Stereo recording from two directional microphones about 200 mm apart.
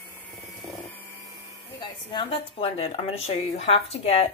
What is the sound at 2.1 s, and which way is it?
A woman's voice, 30° left (ahead or behind).